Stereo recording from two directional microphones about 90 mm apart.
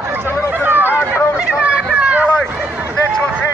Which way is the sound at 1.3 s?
10° right (ahead or behind).